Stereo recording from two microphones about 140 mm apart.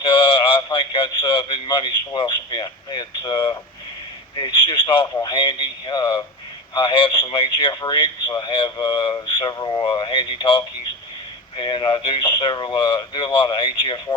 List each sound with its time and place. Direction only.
0.0 s a man's voice: 40° left (ahead or behind)
4.4 s a sound: 35° left (ahead or behind)
5.1 s speech: 35° left (ahead or behind)